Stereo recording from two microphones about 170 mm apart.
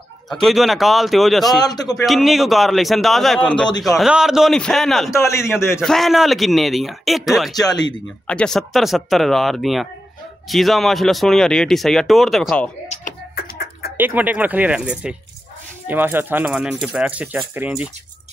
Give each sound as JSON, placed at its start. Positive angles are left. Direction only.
{"t": 0.3, "sound": "speech", "side_deg": 0}
{"t": 1.6, "sound": "a man's voice", "side_deg": 25}
{"t": 2.0, "sound": "a man's voice", "side_deg": 0}
{"t": 5.2, "sound": "a man's voice", "side_deg": 15}
{"t": 5.8, "sound": "speech", "side_deg": 0}
{"t": 12.8, "sound": "typing", "side_deg": 40}
{"t": 13.3, "sound": "a sound", "side_deg": 65}
{"t": 13.9, "sound": "speech", "side_deg": -10}